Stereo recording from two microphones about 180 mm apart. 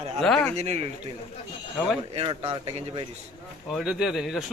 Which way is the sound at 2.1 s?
35° right (ahead or behind).